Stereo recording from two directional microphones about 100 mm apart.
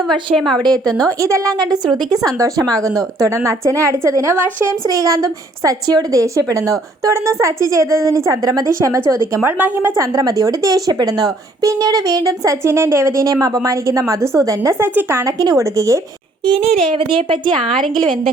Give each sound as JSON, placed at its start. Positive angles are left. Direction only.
{"t": 0.3, "sound": "a woman's voice", "side_deg": 5}
{"t": 0.6, "sound": "a woman's voice", "side_deg": -40}
{"t": 10.1, "sound": "a woman's voice", "side_deg": -40}
{"t": 15.4, "sound": "a woman's voice", "side_deg": -35}
{"t": 16.5, "sound": "speech", "side_deg": -85}
{"t": 17.7, "sound": "a woman's voice", "side_deg": 5}